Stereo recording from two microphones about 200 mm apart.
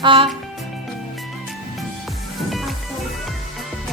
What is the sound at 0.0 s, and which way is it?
Speech, 25° right (ahead or behind).